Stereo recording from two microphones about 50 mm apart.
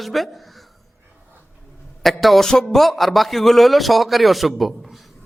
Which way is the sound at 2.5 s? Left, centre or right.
Centre.